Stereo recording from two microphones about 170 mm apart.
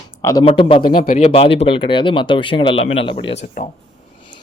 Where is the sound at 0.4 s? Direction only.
30° left (ahead or behind).